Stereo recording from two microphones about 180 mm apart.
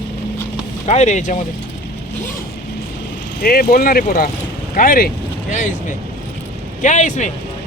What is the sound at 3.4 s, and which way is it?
Speech, 55° left (ahead or behind).